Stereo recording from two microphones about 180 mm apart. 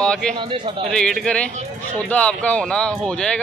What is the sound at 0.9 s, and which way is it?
Speech, 5° left (ahead or behind).